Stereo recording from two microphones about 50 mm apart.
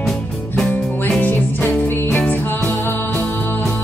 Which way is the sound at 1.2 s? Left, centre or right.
Left.